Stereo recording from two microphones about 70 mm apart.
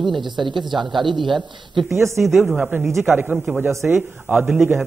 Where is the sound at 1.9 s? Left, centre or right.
Right.